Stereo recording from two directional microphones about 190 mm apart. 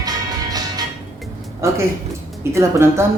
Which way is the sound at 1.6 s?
15° right (ahead or behind).